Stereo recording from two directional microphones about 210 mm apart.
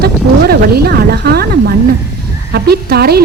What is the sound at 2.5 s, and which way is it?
Speech, 50° right (ahead or behind).